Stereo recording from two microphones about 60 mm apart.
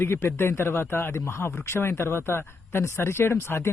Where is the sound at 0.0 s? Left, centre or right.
Left.